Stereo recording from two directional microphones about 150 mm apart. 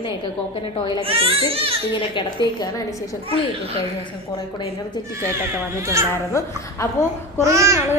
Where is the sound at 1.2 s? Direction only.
40° right (ahead or behind).